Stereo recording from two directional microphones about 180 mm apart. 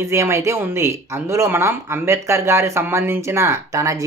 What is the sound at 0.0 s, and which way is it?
Speech, 15° right (ahead or behind).